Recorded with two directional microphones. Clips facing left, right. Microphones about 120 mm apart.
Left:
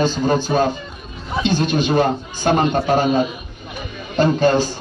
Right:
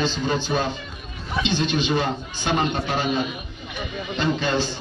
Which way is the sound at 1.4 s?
45° left (ahead or behind).